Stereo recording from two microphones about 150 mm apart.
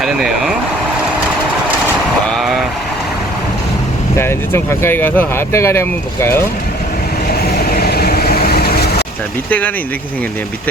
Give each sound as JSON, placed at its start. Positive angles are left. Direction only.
{"t": 0.0, "sound": "vehicle", "side_deg": 0}
{"t": 4.2, "sound": "speech", "side_deg": 15}
{"t": 7.7, "sound": "vehicle", "side_deg": 90}
{"t": 9.5, "sound": "speech", "side_deg": 10}